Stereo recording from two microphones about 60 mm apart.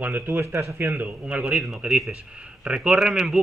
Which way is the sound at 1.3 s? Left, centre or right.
Right.